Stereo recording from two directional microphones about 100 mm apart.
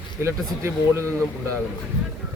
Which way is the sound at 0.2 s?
25° right (ahead or behind).